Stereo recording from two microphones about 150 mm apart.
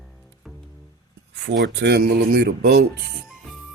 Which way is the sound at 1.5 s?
90° right.